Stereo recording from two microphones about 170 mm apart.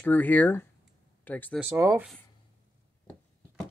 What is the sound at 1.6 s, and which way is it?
Speech, 15° right (ahead or behind).